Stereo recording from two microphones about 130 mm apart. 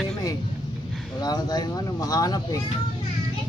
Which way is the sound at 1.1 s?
30° left (ahead or behind).